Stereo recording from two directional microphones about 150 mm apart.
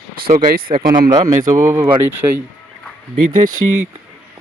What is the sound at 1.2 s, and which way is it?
Speech, 20° right (ahead or behind).